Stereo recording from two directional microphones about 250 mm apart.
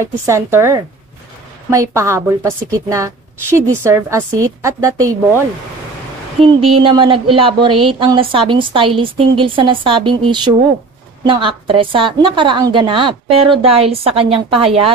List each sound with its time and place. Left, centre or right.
0.0 s a woman's voice: centre
6.5 s speech: right